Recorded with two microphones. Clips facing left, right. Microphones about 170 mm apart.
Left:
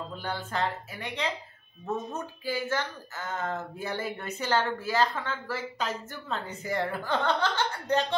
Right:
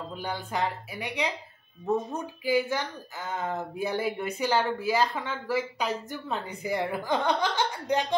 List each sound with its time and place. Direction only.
0.1 s speech: 15° right (ahead or behind)